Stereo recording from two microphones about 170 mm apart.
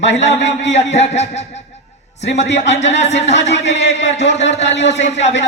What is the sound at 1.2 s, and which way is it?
A man's voice, 40° left (ahead or behind).